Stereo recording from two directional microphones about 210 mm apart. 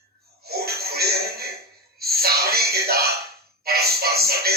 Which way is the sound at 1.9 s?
45° right (ahead or behind).